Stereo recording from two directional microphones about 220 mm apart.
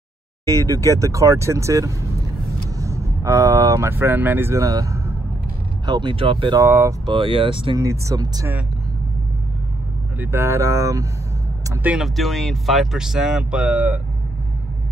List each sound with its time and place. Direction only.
0.5 s speech: 15° right (ahead or behind)
6.6 s speech: 10° right (ahead or behind)
10.1 s speech: 10° right (ahead or behind)